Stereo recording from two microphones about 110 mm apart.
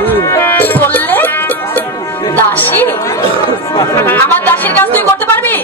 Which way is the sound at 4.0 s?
20° left (ahead or behind).